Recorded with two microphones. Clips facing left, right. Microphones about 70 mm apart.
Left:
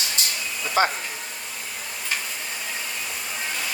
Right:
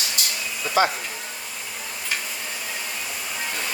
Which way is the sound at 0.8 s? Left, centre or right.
Left.